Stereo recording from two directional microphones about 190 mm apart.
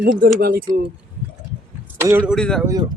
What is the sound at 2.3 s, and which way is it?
Speech, 5° left (ahead or behind).